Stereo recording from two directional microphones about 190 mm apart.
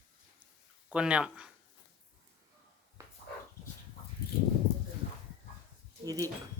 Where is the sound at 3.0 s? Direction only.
15° right (ahead or behind).